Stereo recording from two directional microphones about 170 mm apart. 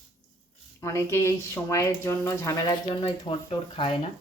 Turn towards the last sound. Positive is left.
turn(degrees=25)  # may be behind; listen again after turning